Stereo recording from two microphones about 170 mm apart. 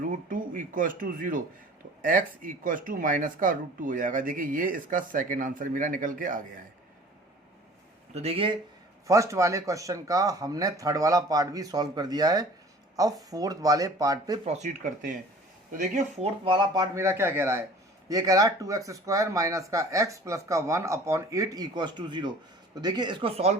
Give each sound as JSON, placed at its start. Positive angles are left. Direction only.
{"t": 0.0, "sound": "speech", "side_deg": -50}
{"t": 8.1, "sound": "speech", "side_deg": -35}
{"t": 9.0, "sound": "speech", "side_deg": -20}
{"t": 14.4, "sound": "speech", "side_deg": -40}
{"t": 16.4, "sound": "speech", "side_deg": -25}